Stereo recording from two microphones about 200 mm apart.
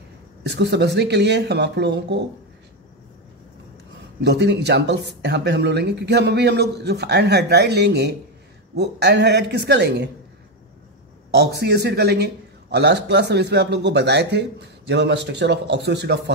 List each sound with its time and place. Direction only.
0.4 s speech: 60° right (ahead or behind)
4.2 s speech: 55° right (ahead or behind)
11.3 s speech: 55° right (ahead or behind)